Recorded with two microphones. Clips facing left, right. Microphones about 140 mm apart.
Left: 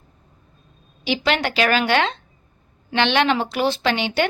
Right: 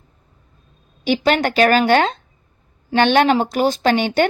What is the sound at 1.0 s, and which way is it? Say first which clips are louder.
A woman's voice: right 5 dB; 45° right (ahead or behind).